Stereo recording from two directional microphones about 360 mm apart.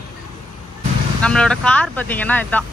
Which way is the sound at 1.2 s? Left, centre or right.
Centre.